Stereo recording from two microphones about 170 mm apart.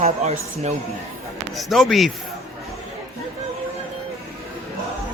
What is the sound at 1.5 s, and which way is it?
Speech, centre (ahead or behind).